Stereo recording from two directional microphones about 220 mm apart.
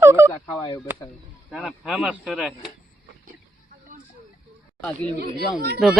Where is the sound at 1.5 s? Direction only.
Centre (ahead or behind).